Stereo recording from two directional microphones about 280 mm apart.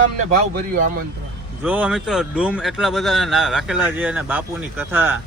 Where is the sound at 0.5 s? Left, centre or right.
Right.